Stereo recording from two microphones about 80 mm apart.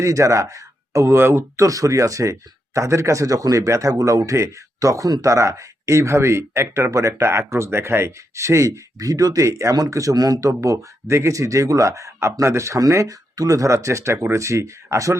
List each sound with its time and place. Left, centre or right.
0.0 s a man's voice: right
10.6 s a man's voice: right